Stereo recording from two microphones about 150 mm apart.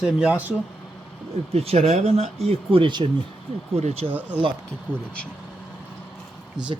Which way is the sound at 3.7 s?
45° right (ahead or behind).